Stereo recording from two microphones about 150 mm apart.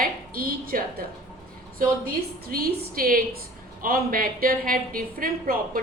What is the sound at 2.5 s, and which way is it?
A woman's voice, 90° right.